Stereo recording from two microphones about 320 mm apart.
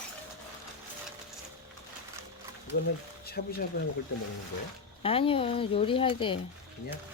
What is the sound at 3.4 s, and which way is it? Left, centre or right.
Speech, left.